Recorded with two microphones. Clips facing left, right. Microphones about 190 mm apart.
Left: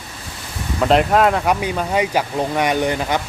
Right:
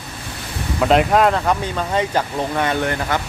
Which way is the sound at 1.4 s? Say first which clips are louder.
Left 1 dB; 10° left (ahead or behind).